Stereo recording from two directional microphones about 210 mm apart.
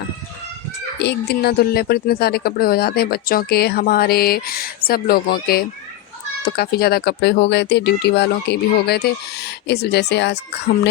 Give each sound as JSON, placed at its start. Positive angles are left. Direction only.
{"t": 0.9, "sound": "a woman's voice", "side_deg": 50}